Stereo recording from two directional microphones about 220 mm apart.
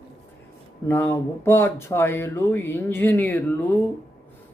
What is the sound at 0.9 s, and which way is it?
Speech, 10° left (ahead or behind).